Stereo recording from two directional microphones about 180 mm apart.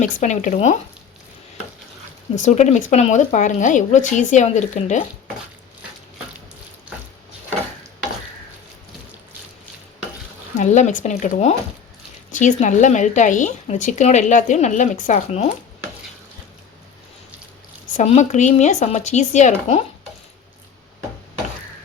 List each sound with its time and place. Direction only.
0.0 s speech: 45° left (ahead or behind)
2.3 s speech: 40° left (ahead or behind)
10.6 s speech: 40° left (ahead or behind)
17.9 s speech: 40° left (ahead or behind)